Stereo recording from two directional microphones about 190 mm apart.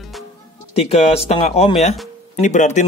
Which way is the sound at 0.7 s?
35° left (ahead or behind).